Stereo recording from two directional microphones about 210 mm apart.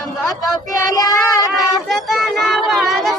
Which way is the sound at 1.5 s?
Centre (ahead or behind).